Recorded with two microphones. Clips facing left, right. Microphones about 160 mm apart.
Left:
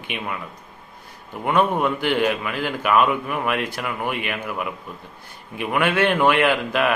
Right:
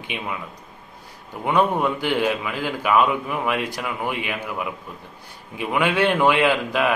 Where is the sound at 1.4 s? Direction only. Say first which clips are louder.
Even; 15° right (ahead or behind).